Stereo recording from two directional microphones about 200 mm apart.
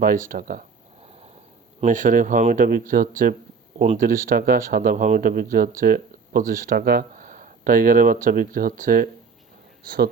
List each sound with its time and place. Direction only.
0.0 s speech: 45° right (ahead or behind)
1.8 s a man's voice: 40° right (ahead or behind)